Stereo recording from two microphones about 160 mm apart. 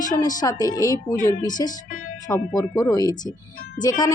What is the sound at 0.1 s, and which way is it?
Speech, 25° left (ahead or behind).